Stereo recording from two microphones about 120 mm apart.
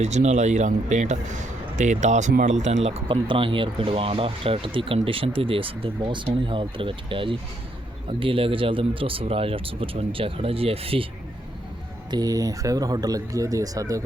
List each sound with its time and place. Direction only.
0.0 s speech: 70° right (ahead or behind)
3.1 s speech: 45° right (ahead or behind)
12.1 s speech: 30° right (ahead or behind)